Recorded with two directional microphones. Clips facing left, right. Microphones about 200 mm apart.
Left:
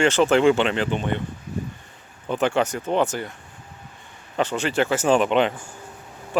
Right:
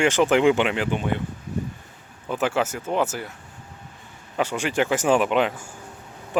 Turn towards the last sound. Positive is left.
turn(degrees=-5)  # may be behind; listen again after turning